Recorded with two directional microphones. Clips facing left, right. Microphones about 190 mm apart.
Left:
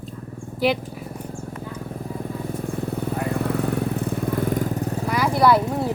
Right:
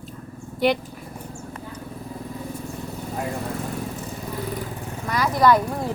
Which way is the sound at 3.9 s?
60° left (ahead or behind).